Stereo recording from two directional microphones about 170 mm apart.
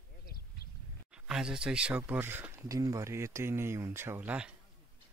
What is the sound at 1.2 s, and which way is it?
Speech, 5° right (ahead or behind).